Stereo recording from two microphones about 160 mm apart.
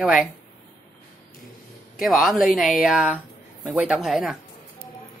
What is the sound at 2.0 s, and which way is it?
Speech, centre (ahead or behind).